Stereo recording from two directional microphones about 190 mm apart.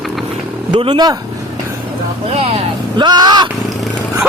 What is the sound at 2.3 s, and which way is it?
Speech, 30° right (ahead or behind).